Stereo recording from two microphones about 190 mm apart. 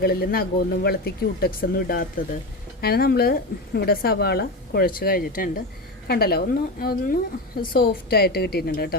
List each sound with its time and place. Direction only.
0.0 s a woman's voice: 55° left (ahead or behind)